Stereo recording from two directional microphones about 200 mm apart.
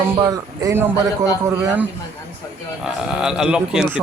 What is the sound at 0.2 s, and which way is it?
Speech, 20° right (ahead or behind).